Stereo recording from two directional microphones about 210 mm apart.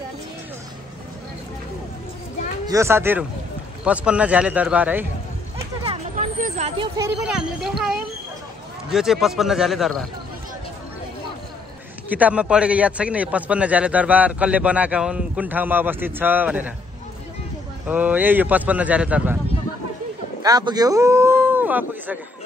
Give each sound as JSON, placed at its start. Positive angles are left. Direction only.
{"t": 2.6, "sound": "a man's voice", "side_deg": -15}
{"t": 5.9, "sound": "a sound", "side_deg": -35}
{"t": 7.2, "sound": "a man's voice", "side_deg": -5}
{"t": 12.1, "sound": "a man's voice", "side_deg": -5}
{"t": 17.8, "sound": "a man's voice", "side_deg": -10}
{"t": 20.4, "sound": "a man's voice", "side_deg": -20}